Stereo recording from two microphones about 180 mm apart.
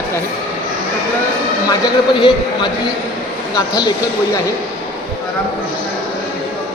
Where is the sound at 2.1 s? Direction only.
25° left (ahead or behind).